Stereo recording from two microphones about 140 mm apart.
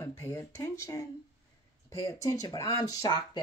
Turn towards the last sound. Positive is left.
turn(degrees=25)  # may be behind; listen again after turning